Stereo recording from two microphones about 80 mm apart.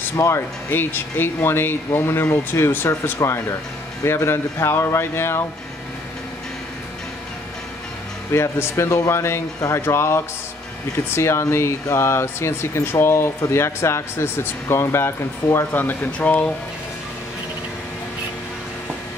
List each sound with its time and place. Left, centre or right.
0.1 s speech: left
0.7 s speech: left
2.9 s speech: left
8.3 s speech: left; by 16.5 s centre